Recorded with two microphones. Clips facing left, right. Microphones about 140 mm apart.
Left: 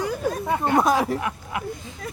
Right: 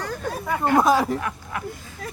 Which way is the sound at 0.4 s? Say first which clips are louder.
Right 2 dB; 25° left (ahead or behind).